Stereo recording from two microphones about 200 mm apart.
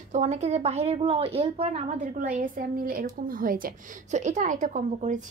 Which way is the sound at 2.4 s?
45° right (ahead or behind).